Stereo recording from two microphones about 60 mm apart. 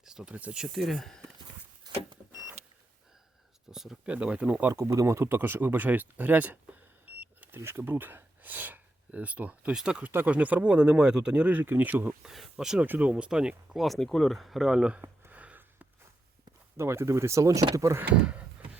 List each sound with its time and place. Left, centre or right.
0.0 s a sound: centre
0.7 s speech: centre
3.7 s a sound: centre
4.0 s speech: centre
4.7 s speech: right
7.5 s speech: right; by 11.5 s centre
11.5 s speech: right
12.2 s speech: centre
12.8 s speech: right
13.7 s speech: centre
15.3 s a sound: right
16.7 s speech: right
18.1 s a sound: centre